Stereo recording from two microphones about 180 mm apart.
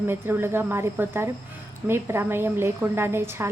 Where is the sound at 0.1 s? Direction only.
10° right (ahead or behind).